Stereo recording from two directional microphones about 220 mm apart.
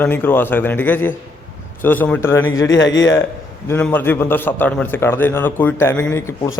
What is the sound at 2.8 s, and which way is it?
Speech, 55° left (ahead or behind).